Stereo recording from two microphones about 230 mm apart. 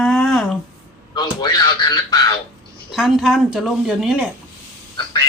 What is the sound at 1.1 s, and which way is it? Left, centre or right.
Speech, centre.